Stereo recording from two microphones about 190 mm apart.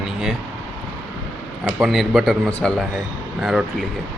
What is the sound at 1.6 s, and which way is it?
A man's voice, centre (ahead or behind).